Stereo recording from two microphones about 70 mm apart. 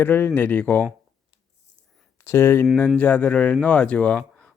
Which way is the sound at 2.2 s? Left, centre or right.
Left.